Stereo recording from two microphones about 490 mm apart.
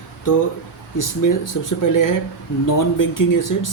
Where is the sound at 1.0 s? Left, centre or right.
Left.